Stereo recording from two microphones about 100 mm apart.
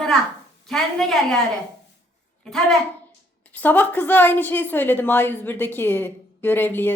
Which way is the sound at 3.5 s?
15° left (ahead or behind).